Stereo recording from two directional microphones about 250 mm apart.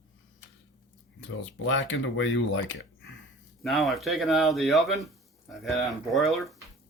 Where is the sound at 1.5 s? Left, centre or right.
Left.